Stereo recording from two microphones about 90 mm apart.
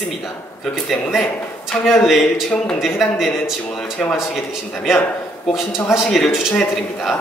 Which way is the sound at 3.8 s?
10° left (ahead or behind).